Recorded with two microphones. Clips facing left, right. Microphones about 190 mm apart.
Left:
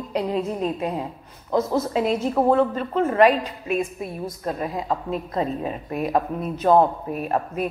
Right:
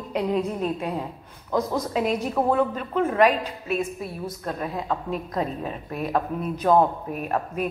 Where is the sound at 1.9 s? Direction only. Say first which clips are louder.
Left 2 dB; centre (ahead or behind).